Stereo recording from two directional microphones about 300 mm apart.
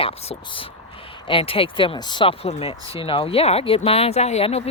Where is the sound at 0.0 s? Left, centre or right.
Centre.